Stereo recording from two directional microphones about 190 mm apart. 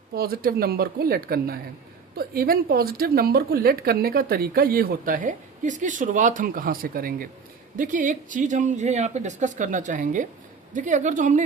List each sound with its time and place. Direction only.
0.1 s a woman's voice: 55° right (ahead or behind)